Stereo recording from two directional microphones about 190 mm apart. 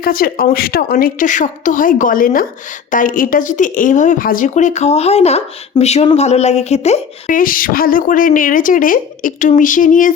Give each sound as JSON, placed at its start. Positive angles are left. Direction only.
{"t": 0.0, "sound": "a woman's voice", "side_deg": 50}